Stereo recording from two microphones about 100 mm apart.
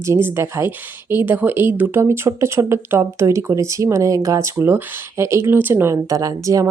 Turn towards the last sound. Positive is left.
turn(degrees=-35)  # may be behind; listen again after turning